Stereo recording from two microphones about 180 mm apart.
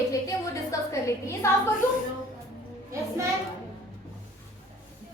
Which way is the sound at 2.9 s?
15° right (ahead or behind).